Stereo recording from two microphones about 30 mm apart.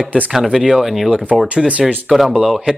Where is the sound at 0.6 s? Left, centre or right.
Centre.